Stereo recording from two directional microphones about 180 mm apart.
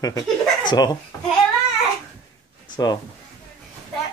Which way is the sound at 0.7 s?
20° left (ahead or behind).